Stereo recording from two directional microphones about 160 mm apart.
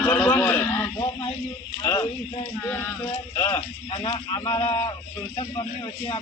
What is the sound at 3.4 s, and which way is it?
Speech, 15° left (ahead or behind).